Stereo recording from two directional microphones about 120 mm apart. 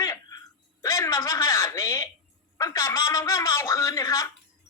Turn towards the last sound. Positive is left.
turn(degrees=25)  # may be behind; listen again after turning